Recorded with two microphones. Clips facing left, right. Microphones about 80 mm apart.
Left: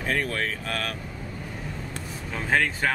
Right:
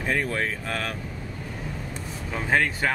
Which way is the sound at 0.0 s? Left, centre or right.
Centre.